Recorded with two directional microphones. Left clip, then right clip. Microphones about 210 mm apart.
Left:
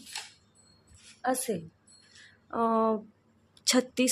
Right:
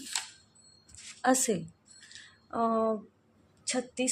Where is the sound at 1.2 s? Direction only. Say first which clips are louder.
Right 3 dB; 10° right (ahead or behind).